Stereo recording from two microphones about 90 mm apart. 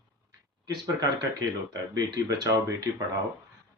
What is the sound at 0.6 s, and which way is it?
Speech, 45° right (ahead or behind).